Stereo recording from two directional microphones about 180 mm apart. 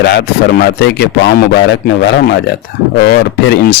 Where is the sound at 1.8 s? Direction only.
60° left (ahead or behind).